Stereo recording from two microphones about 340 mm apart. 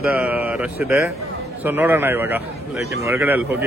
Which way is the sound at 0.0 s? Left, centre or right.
Centre.